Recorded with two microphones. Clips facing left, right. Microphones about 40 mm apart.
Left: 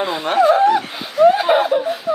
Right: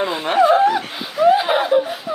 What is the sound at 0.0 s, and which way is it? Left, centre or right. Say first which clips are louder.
Speech: even; centre.